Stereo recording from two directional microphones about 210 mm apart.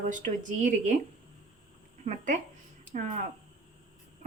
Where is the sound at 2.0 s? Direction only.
35° right (ahead or behind).